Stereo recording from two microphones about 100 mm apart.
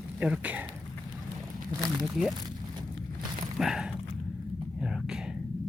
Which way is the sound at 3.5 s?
5° right (ahead or behind).